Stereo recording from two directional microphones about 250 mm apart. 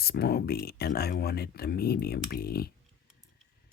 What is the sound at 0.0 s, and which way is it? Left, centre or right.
Speech, left.